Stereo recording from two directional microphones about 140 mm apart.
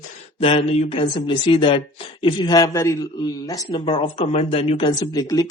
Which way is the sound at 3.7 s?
35° left (ahead or behind).